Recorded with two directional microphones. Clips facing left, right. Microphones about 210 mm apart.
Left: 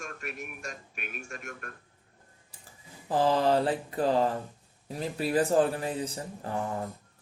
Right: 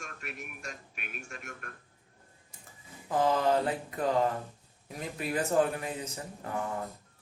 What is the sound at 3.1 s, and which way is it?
Speech, 30° left (ahead or behind).